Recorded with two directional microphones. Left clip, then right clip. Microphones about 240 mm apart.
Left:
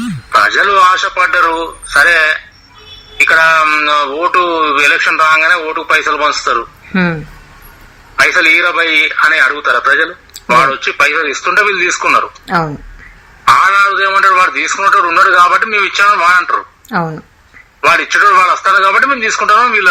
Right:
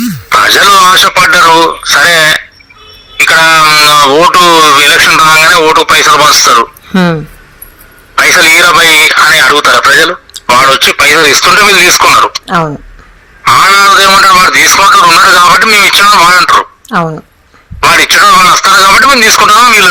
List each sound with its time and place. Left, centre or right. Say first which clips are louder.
0.3 s speech: right 6 dB; right
6.9 s speech: right 4 dB; centre
8.2 s speech: right 5 dB; right
12.5 s a woman's voice: right 4 dB; centre
13.4 s speech: right 4 dB; right
16.9 s a woman's voice: right 5 dB; centre
17.7 s speech: right 5 dB; right